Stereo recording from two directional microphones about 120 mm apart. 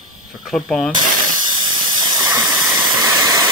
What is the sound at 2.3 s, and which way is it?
Steam, 30° right (ahead or behind).